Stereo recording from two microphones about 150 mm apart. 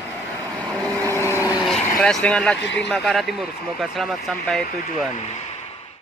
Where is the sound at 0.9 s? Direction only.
20° right (ahead or behind).